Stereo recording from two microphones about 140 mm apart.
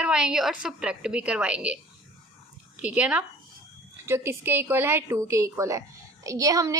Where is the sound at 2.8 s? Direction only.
10° right (ahead or behind).